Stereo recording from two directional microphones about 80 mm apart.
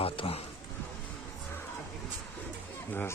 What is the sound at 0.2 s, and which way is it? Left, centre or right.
Speech, left.